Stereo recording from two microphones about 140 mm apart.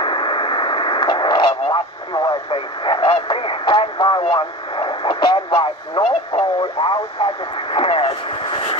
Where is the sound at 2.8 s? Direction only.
40° left (ahead or behind).